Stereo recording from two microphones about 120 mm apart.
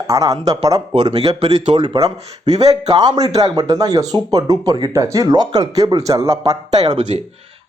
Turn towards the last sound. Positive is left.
turn(degrees=-35)  # may be behind; listen again after turning